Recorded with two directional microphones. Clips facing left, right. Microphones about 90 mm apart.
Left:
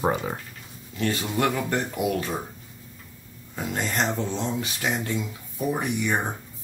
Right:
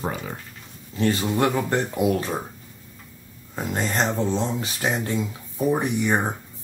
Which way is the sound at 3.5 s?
35° right (ahead or behind).